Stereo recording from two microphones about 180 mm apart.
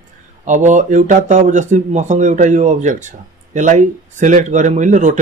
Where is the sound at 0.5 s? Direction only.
45° right (ahead or behind).